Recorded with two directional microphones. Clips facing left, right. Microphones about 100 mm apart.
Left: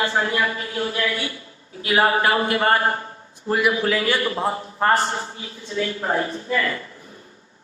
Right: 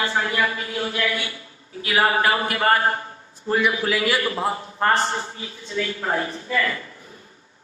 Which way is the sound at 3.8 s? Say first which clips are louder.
Left 1 dB; 35° left (ahead or behind).